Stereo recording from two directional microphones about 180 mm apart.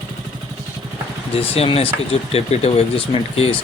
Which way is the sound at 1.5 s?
35° left (ahead or behind).